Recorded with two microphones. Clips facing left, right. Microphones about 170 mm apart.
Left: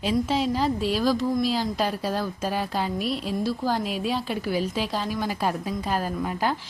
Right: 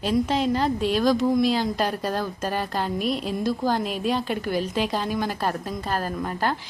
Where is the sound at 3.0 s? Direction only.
45° right (ahead or behind).